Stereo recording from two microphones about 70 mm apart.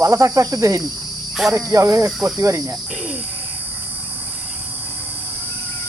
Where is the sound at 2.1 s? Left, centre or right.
Centre.